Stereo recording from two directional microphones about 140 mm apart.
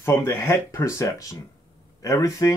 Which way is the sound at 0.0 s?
15° left (ahead or behind).